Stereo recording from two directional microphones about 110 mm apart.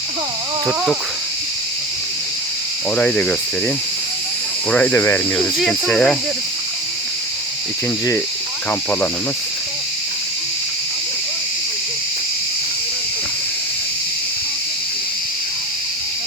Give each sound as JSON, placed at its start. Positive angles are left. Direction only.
{"t": 2.9, "sound": "speech", "side_deg": 10}
{"t": 4.7, "sound": "speech", "side_deg": 15}
{"t": 5.4, "sound": "speech", "side_deg": 5}